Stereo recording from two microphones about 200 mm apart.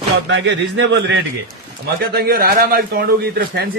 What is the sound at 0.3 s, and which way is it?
Speech, 65° right (ahead or behind).